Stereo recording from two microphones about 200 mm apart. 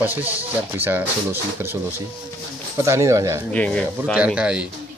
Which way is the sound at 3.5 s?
5° left (ahead or behind).